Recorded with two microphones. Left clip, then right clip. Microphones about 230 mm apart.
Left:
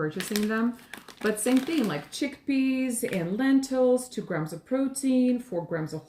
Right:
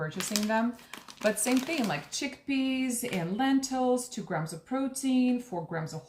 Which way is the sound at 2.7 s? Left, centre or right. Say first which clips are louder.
Left 3 dB; centre.